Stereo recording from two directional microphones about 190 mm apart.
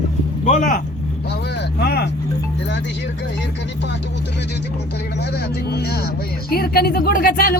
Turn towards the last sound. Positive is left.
turn(degrees=50)  # may be behind; listen again after turning